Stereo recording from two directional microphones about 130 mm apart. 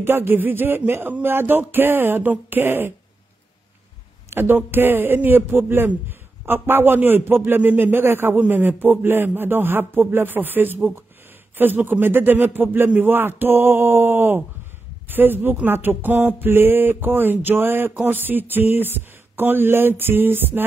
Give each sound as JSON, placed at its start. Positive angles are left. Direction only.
{"t": 0.0, "sound": "a man's voice", "side_deg": -15}
{"t": 4.3, "sound": "a man's voice", "side_deg": -15}